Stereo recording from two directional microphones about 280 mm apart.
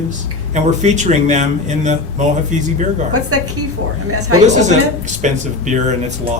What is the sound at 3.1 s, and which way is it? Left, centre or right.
A woman's voice, right.